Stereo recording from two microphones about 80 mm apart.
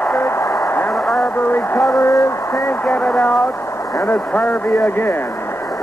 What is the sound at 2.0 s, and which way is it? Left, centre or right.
Speech, left.